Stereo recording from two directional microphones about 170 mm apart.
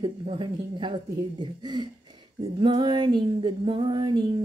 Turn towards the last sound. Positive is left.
turn(degrees=-25)  # may be behind; listen again after turning